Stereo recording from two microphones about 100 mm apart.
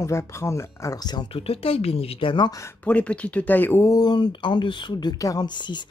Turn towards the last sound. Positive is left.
turn(degrees=50)  # may be behind; listen again after turning